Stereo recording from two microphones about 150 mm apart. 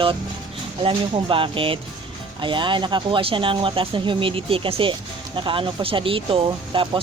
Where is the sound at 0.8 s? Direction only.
35° right (ahead or behind).